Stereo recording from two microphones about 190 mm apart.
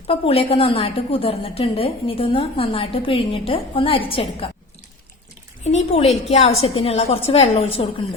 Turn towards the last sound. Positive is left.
turn(degrees=30)  # may be behind; listen again after turning